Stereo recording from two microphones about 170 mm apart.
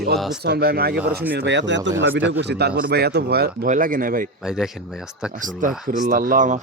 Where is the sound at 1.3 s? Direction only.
90° right; by 4.3 s 55° right (ahead or behind).